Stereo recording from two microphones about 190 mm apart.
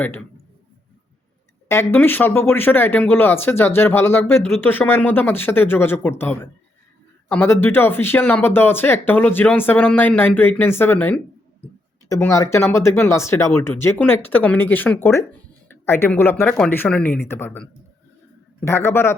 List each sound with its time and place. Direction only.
1.6 s speech: 15° left (ahead or behind)